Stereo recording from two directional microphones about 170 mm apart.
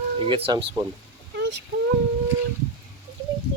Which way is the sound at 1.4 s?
90° right.